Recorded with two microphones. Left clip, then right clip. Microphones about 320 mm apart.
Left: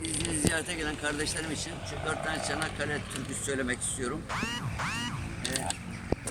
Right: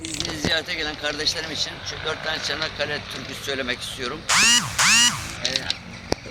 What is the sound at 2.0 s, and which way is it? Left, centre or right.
Speech, centre.